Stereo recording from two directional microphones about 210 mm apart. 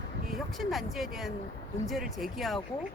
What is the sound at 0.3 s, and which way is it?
Speech, centre (ahead or behind).